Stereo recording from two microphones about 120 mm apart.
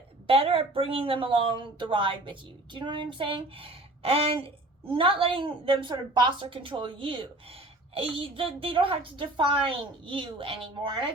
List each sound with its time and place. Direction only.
0.3 s a woman's voice: 50° right (ahead or behind)